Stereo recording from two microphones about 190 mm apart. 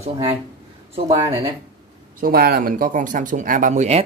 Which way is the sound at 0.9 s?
30° right (ahead or behind).